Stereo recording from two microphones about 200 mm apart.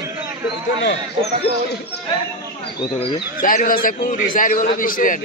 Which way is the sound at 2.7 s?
25° left (ahead or behind).